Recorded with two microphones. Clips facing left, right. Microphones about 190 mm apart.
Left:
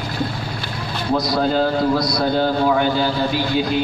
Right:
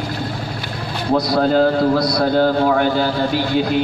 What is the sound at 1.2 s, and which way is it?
A man's voice, 60° right (ahead or behind).